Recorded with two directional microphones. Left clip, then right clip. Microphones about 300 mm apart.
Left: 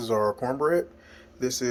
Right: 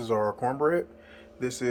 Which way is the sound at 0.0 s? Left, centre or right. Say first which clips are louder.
Left 1 dB; centre.